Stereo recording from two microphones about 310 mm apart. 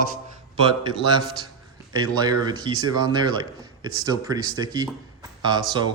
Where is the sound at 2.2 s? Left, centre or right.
Centre.